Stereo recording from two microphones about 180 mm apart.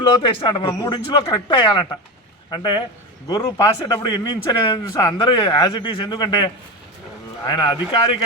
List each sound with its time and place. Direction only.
0.2 s speech: 25° left (ahead or behind)